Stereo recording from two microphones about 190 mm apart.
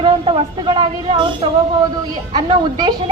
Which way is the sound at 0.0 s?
25° right (ahead or behind).